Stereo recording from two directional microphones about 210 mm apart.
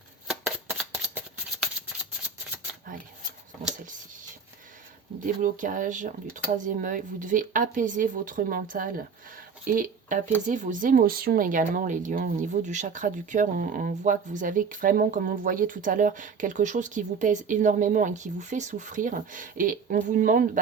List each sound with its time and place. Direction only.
0.3 s shuffling cards: centre (ahead or behind)
2.9 s a sound: 40° right (ahead or behind)
5.2 s speech: 40° right (ahead or behind)